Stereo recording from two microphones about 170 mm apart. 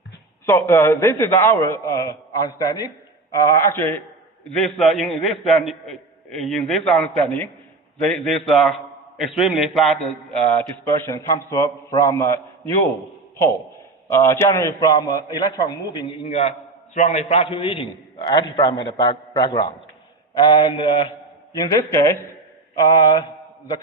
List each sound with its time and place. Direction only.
0.4 s a man's voice: 15° left (ahead or behind)
4.4 s a man's voice: 5° left (ahead or behind)
14.1 s a man's voice: 15° left (ahead or behind)
15.4 s mantra: 25° left (ahead or behind)
16.3 s a man's voice: 40° left (ahead or behind)
20.3 s mantra: 25° left (ahead or behind)
21.6 s a man's voice: 20° left (ahead or behind)
22.9 s mantra: 25° left (ahead or behind)